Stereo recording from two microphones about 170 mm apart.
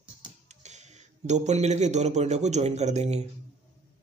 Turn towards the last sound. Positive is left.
turn(degrees=-40)  # may be behind; listen again after turning